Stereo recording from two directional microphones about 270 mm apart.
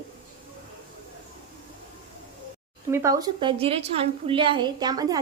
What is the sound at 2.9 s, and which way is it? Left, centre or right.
A woman's voice, centre.